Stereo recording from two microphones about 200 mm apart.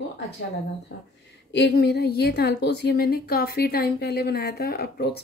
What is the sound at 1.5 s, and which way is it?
A woman's voice, 55° left (ahead or behind).